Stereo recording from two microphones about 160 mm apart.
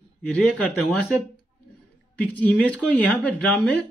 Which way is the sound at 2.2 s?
10° left (ahead or behind).